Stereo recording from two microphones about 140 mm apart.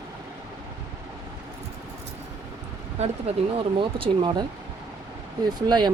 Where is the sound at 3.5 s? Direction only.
40° right (ahead or behind).